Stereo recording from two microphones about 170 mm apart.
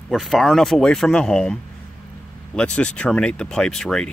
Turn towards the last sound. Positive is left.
turn(degrees=5)  # may be behind; listen again after turning